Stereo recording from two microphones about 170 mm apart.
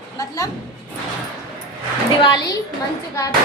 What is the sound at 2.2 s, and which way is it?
Speech, 25° left (ahead or behind).